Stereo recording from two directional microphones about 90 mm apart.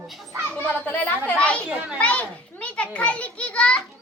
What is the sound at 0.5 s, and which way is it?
A woman's voice, 15° left (ahead or behind).